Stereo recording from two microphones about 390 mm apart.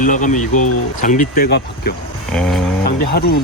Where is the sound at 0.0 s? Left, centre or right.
Centre.